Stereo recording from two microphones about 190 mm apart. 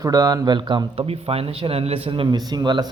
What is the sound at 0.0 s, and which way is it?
Speech, 20° right (ahead or behind).